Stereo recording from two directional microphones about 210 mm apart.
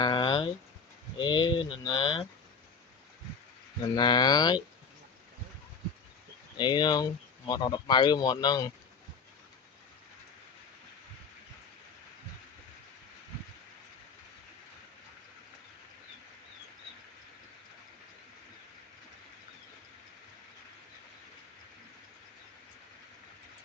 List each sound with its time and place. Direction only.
0.0 s a sound: 20° left (ahead or behind)
1.2 s speech: 20° left (ahead or behind)
3.9 s speech: 20° left (ahead or behind)
6.6 s speech: 20° left (ahead or behind)